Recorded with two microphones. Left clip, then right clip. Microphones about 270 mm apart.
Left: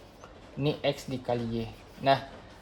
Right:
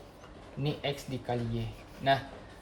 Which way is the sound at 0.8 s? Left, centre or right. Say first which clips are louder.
Left 5 dB; left.